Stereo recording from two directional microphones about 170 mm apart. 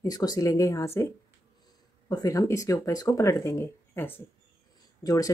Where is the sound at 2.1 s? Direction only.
20° left (ahead or behind).